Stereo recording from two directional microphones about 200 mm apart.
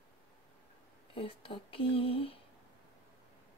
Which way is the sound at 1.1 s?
25° left (ahead or behind).